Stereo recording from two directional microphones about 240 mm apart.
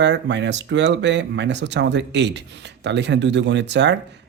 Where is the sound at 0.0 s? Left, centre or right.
Right.